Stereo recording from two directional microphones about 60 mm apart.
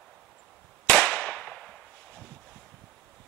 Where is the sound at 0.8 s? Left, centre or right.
Left.